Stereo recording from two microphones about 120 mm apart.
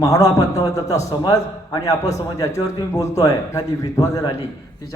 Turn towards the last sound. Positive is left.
turn(degrees=30)  # may be behind; listen again after turning